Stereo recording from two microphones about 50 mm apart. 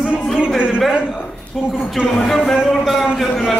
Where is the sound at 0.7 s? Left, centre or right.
Centre.